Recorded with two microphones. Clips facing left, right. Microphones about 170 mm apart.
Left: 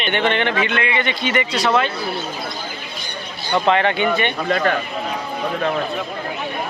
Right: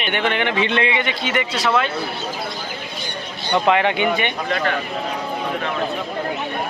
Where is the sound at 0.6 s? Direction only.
30° right (ahead or behind).